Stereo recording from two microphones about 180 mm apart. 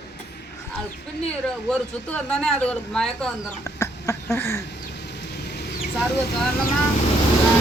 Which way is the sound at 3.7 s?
15° left (ahead or behind).